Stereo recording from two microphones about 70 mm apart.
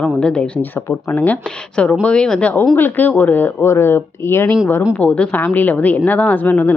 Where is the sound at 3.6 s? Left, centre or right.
Left.